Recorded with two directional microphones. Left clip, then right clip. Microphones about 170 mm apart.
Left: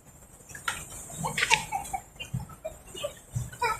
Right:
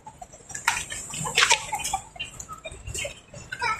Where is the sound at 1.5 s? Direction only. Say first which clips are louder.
Left 1 dB; 80° right.